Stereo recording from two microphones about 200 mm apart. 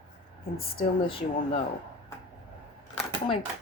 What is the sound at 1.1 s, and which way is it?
Speech, 25° left (ahead or behind).